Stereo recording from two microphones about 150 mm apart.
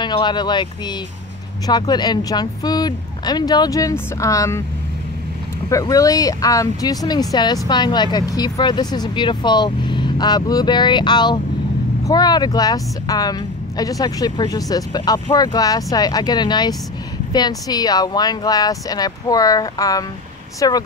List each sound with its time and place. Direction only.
0.0 s speech: 30° left (ahead or behind)
5.7 s speech: 20° left (ahead or behind)